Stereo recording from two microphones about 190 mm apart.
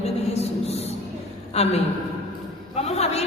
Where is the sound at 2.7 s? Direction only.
35° left (ahead or behind).